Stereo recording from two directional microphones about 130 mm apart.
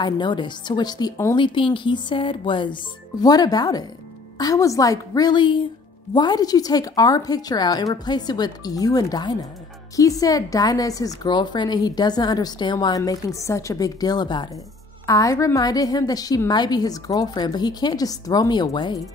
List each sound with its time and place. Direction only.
0.0 s a woman's voice: 35° left (ahead or behind)